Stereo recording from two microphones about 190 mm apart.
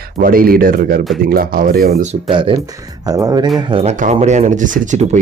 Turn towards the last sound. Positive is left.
turn(degrees=-40)  # may be behind; listen again after turning